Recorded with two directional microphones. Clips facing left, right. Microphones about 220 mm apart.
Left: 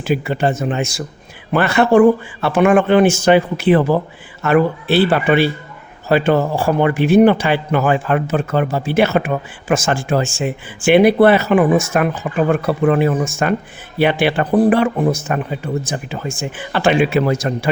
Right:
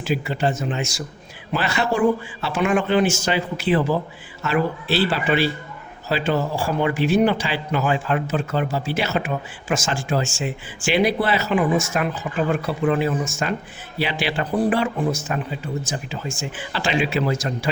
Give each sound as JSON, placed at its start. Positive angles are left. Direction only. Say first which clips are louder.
{"t": 0.0, "sound": "a man's voice", "louder": "left 5 dB", "side_deg": 55}